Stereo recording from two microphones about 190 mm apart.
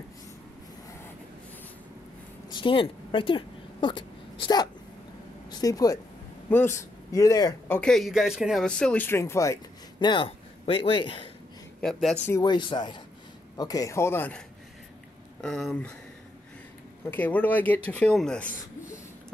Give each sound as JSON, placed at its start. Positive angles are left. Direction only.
{"t": 2.5, "sound": "speech", "side_deg": 25}
{"t": 7.1, "sound": "speech", "side_deg": 20}
{"t": 11.8, "sound": "speech", "side_deg": 0}
{"t": 12.3, "sound": "speech", "side_deg": 20}
{"t": 15.4, "sound": "speech", "side_deg": 5}
{"t": 17.0, "sound": "speech", "side_deg": 10}